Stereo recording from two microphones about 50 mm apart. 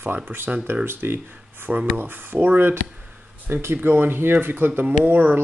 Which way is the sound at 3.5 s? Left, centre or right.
Right.